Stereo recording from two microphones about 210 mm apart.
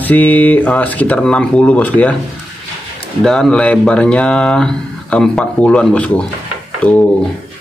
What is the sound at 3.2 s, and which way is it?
Speech, 5° left (ahead or behind).